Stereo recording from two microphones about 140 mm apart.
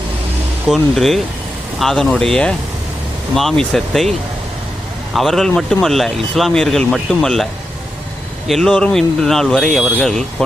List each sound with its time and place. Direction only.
0.7 s speech: centre (ahead or behind)
5.1 s speech: centre (ahead or behind)
8.4 s speech: 5° left (ahead or behind)